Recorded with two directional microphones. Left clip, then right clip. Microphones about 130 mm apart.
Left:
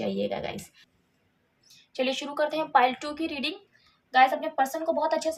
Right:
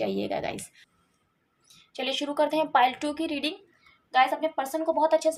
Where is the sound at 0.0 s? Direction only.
40° right (ahead or behind).